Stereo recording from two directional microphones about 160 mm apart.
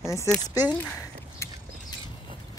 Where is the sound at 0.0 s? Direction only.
20° left (ahead or behind).